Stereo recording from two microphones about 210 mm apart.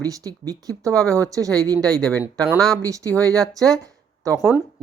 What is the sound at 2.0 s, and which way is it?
Speech, 5° left (ahead or behind).